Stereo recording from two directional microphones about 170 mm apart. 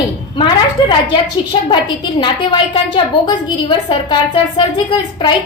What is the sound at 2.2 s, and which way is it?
A woman's voice, 30° left (ahead or behind).